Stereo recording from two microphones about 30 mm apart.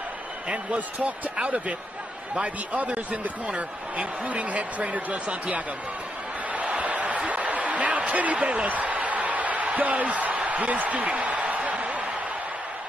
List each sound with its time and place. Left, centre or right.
0.7 s speech: right
1.4 s speech: right
4.3 s speech: right
6.8 s a sound: right
8.6 s speech: right
8.9 s a sound: right